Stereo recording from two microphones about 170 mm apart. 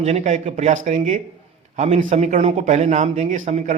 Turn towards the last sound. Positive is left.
turn(degrees=-45)  # may be behind; listen again after turning